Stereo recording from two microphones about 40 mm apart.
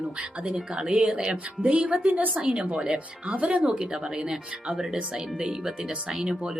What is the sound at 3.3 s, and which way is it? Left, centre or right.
Speech, right.